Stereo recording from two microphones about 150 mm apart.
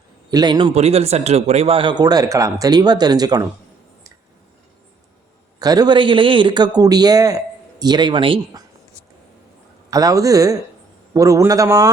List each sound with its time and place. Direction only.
0.3 s a man's voice: 25° right (ahead or behind)
0.7 s a man's voice: 45° right (ahead or behind); by 3.4 s 25° right (ahead or behind)
5.5 s a man's voice: 25° right (ahead or behind)
9.9 s a man's voice: 25° right (ahead or behind)